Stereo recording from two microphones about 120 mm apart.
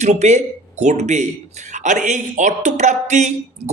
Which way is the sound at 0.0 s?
70° right (ahead or behind).